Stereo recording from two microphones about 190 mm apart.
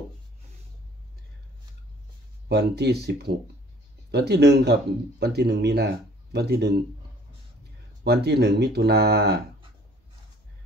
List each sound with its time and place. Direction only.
2.4 s speech: 60° right (ahead or behind)
8.0 s speech: 60° right (ahead or behind)